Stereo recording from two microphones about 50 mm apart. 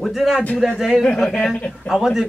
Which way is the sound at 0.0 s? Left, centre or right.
Centre.